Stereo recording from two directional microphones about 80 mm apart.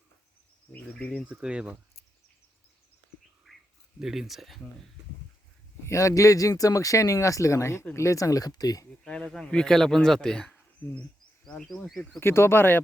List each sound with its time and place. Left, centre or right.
0.7 s speech: centre
1.3 s speech: centre
3.5 s a sound: centre
4.0 s speech: centre
5.8 s speech: left
9.2 s speech: centre
10.8 s speech: left
11.4 s speech: centre
12.2 s speech: left